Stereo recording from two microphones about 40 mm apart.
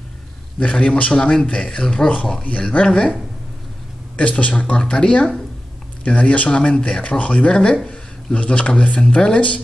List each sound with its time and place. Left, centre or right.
0.6 s speech: left
4.2 s speech: left
4.7 s speech: left
7.5 s speech: left